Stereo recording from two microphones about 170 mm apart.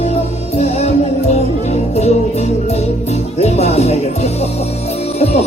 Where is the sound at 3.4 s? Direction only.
40° left (ahead or behind).